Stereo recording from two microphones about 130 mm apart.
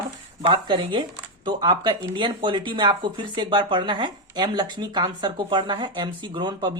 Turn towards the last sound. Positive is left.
turn(degrees=-35)  # may be behind; listen again after turning